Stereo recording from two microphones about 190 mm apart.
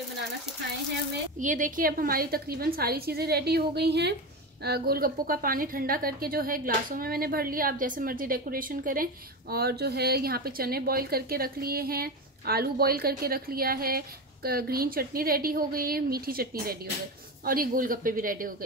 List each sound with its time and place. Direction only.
1.4 s a woman's voice: 45° right (ahead or behind)